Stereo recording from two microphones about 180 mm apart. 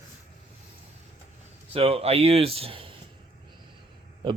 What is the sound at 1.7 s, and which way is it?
Speech, 30° right (ahead or behind).